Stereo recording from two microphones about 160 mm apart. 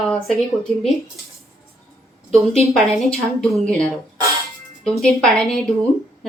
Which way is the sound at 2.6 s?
Centre (ahead or behind).